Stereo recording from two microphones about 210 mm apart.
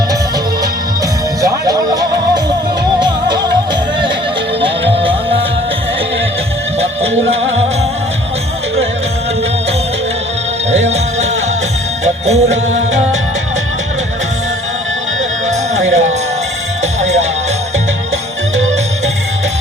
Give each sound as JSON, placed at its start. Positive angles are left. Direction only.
{"t": 1.4, "sound": "music", "side_deg": -15}
{"t": 4.6, "sound": "music", "side_deg": -25}
{"t": 10.7, "sound": "music", "side_deg": -30}
{"t": 15.4, "sound": "music", "side_deg": -35}